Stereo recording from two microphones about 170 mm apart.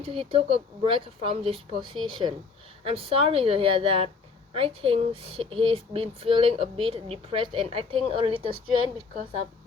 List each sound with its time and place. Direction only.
0.0 s speech: 35° right (ahead or behind)